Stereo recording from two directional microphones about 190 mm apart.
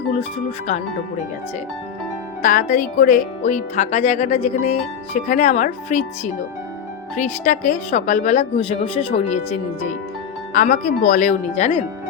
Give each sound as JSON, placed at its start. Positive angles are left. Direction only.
{"t": 0.7, "sound": "speech", "side_deg": 35}
{"t": 2.4, "sound": "speech", "side_deg": 45}
{"t": 10.5, "sound": "speech", "side_deg": 45}